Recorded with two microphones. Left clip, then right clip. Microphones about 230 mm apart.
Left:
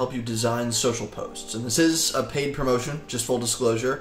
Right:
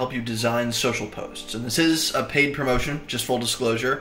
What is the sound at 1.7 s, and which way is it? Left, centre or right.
Speech, centre.